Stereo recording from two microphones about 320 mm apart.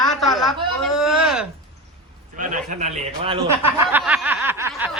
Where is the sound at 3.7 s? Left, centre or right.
Centre.